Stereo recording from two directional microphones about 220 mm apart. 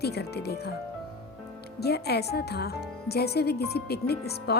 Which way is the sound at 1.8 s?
45° left (ahead or behind).